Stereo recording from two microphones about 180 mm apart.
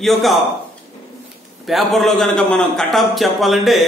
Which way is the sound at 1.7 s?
Centre (ahead or behind).